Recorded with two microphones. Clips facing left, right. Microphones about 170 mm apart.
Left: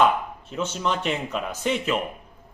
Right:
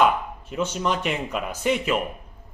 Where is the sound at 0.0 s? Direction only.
10° right (ahead or behind).